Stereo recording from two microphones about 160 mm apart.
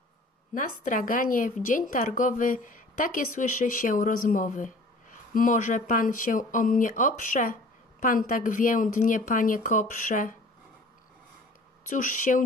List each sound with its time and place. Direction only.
0.6 s a woman's voice: 55° left (ahead or behind)
11.9 s speech: 55° left (ahead or behind)